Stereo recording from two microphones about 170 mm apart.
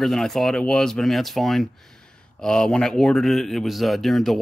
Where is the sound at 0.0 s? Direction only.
Centre (ahead or behind).